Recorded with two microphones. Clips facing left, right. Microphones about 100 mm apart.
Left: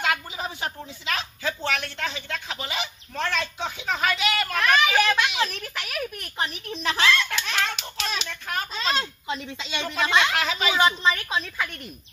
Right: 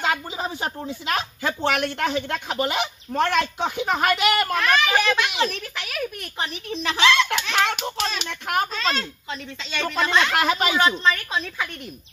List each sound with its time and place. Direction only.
0.0 s speech: 30° right (ahead or behind); by 4.6 s 55° right (ahead or behind)
4.6 s a child's voice: centre (ahead or behind)
7.0 s a child's voice: 85° right
8.2 s speech: 65° right (ahead or behind)
8.9 s speech: 15° left (ahead or behind)
10.3 s speech: 55° right (ahead or behind)
10.8 s a child's voice: 10° left (ahead or behind)